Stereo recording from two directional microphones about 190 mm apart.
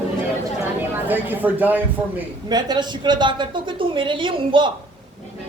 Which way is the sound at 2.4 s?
20° right (ahead or behind).